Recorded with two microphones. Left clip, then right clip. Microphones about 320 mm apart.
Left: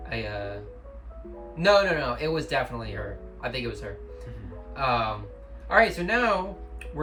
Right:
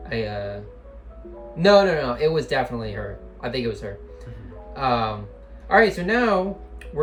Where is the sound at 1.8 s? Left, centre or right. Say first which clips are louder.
Right 5 dB; centre.